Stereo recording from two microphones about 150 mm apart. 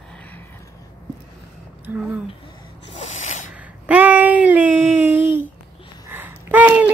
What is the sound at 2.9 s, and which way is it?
Snort, 45° left (ahead or behind).